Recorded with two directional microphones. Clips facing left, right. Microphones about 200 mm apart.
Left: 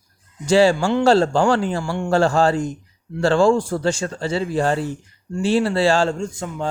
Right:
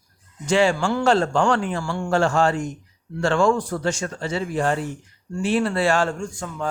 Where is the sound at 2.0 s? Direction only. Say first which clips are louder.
Left 3 dB; 35° left (ahead or behind).